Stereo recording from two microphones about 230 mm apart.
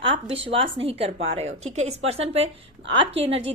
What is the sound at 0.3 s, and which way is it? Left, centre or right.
A woman's voice, right.